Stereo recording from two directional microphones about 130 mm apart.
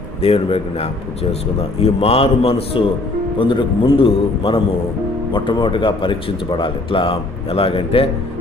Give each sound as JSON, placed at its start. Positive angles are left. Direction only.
{"t": 0.2, "sound": "a man's voice", "side_deg": 50}